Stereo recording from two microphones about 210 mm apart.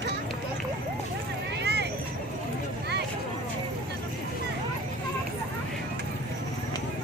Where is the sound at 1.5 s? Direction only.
50° right (ahead or behind).